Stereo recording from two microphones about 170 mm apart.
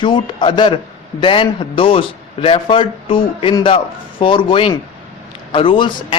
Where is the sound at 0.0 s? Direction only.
30° left (ahead or behind).